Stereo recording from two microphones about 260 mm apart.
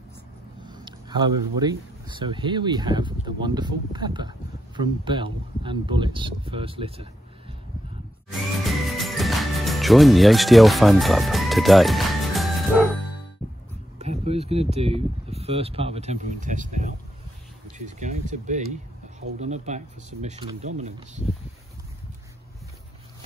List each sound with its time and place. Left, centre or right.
0.7 s speech: centre
8.3 s music: centre
13.9 s speech: right